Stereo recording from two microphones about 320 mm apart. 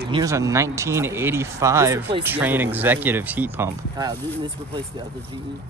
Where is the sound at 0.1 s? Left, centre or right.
Centre.